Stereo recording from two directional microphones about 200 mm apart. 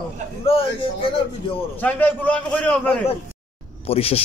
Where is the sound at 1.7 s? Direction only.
10° left (ahead or behind).